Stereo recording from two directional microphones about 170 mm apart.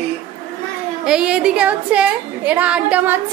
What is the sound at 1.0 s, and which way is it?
A woman's voice, 5° right (ahead or behind).